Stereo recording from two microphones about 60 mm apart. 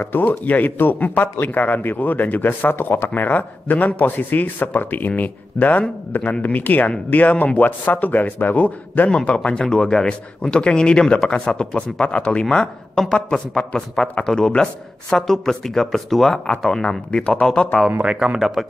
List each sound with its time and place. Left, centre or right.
0.0 s a man's voice: left; by 17.5 s centre
18.0 s speech: centre